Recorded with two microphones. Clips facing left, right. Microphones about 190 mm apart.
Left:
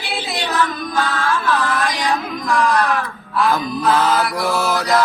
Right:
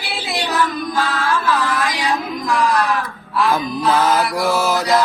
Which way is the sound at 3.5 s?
15° right (ahead or behind).